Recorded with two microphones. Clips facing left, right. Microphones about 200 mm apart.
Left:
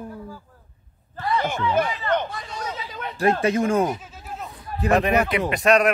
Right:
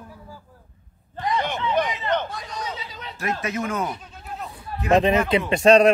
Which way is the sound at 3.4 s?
30° left (ahead or behind).